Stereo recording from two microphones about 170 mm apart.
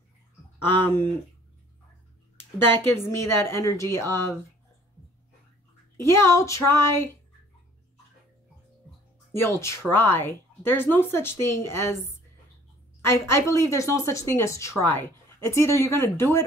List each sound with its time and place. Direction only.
2.7 s a woman's voice: 15° left (ahead or behind)
5.9 s a woman's voice: 15° left (ahead or behind)
9.3 s a woman's voice: 15° left (ahead or behind)
13.0 s a woman's voice: 15° left (ahead or behind)